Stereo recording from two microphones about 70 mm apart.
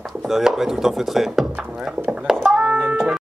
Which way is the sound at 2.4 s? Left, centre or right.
Centre.